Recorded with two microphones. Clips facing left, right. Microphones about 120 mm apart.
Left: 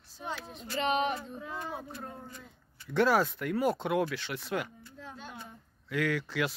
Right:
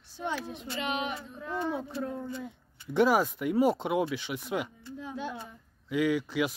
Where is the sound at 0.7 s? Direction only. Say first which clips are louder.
Left 4 dB; 35° left (ahead or behind).